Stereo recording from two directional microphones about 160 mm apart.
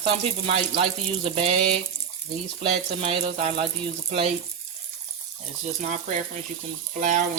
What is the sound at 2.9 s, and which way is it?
Speech, 35° right (ahead or behind).